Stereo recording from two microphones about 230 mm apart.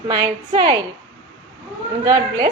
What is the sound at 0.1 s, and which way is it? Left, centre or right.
Speech, centre.